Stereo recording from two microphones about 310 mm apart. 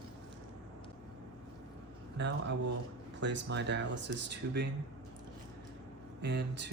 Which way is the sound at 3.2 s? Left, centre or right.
Right.